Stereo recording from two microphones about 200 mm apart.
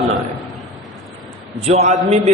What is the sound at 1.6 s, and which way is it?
Speech, 35° right (ahead or behind).